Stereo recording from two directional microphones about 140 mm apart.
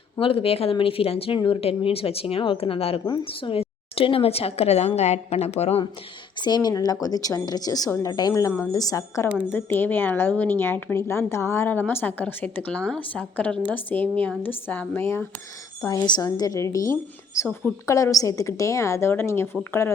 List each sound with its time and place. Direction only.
0.2 s speech: 40° left (ahead or behind)
6.4 s a woman's voice: 30° left (ahead or behind)
15.8 s a woman's voice: 25° left (ahead or behind)